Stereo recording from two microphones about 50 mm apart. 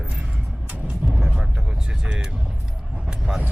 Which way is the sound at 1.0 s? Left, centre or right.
Centre.